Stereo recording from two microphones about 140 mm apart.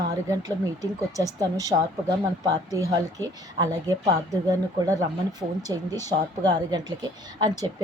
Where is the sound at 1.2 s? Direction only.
25° right (ahead or behind).